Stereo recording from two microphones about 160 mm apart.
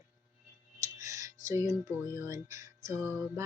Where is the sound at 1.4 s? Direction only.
20° right (ahead or behind).